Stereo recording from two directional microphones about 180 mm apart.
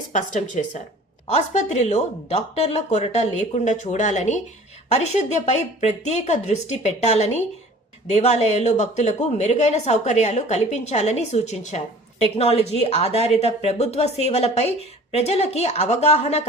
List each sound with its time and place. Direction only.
0.1 s a woman's voice: 40° left (ahead or behind)